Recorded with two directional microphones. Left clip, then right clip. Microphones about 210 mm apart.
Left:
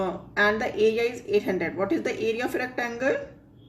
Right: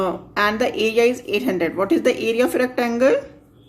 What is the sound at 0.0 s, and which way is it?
A woman's voice, 50° right (ahead or behind).